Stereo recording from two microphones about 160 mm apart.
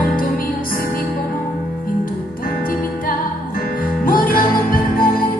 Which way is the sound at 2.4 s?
65° left (ahead or behind).